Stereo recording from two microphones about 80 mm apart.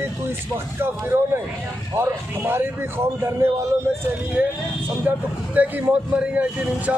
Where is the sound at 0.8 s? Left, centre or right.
Right.